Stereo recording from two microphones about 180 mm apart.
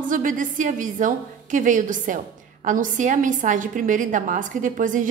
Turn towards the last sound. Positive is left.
turn(degrees=-45)  # may be behind; listen again after turning